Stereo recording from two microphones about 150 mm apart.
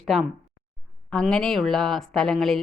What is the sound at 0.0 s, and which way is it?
Speech, centre (ahead or behind).